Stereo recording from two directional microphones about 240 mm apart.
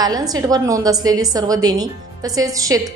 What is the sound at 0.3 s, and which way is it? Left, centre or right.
A woman's voice, centre.